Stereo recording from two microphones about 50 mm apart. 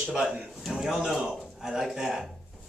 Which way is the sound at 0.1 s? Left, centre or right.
Centre.